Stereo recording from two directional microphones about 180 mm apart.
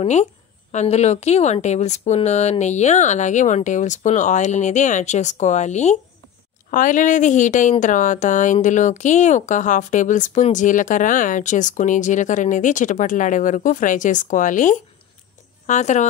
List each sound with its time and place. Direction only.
0.0 s a woman's voice: 40° left (ahead or behind)